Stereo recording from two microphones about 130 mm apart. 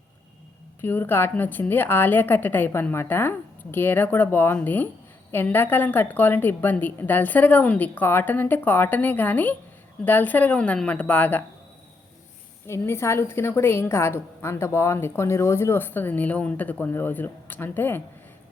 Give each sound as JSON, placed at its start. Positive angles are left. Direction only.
{"t": 0.8, "sound": "a woman's voice", "side_deg": 15}
{"t": 12.6, "sound": "a woman's voice", "side_deg": 20}